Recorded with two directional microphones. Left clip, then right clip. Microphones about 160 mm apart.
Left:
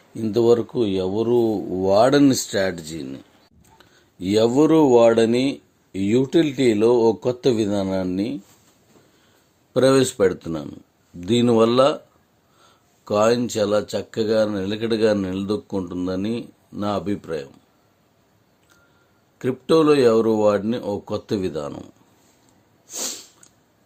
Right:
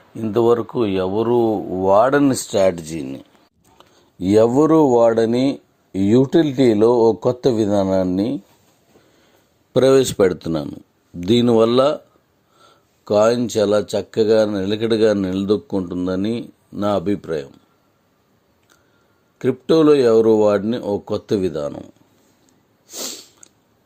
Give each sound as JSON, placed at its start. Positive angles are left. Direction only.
{"t": 0.3, "sound": "speech", "side_deg": 25}
{"t": 0.8, "sound": "speech", "side_deg": 15}
{"t": 1.3, "sound": "speech", "side_deg": -15}
{"t": 1.8, "sound": "speech", "side_deg": 30}
{"t": 2.5, "sound": "speech", "side_deg": -20}
{"t": 4.2, "sound": "speech", "side_deg": -25}
{"t": 9.7, "sound": "speech", "side_deg": -40}
{"t": 19.4, "sound": "speech", "side_deg": -25}
{"t": 22.9, "sound": "sneeze", "side_deg": -15}